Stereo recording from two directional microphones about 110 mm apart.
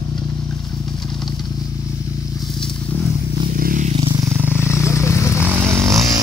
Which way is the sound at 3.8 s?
65° right (ahead or behind).